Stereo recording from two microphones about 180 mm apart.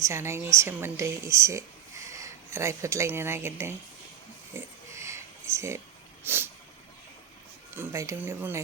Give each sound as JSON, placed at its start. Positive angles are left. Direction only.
{"t": 0.0, "sound": "speech", "side_deg": -15}
{"t": 4.5, "sound": "pig", "side_deg": -15}
{"t": 6.2, "sound": "vehicle", "side_deg": -10}
{"t": 7.8, "sound": "speech", "side_deg": -15}